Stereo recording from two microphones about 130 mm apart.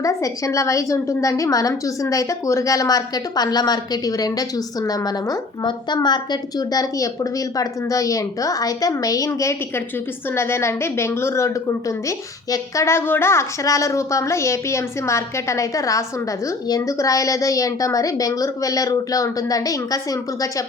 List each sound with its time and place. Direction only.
0.0 s a woman's voice: 25° left (ahead or behind)